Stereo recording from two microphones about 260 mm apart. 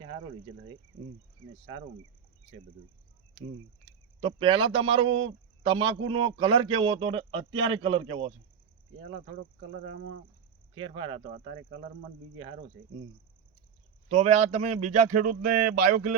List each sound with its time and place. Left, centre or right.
4.2 s a man's voice: centre
9.8 s speech: right
10.9 s a man's voice: centre
14.2 s a man's voice: right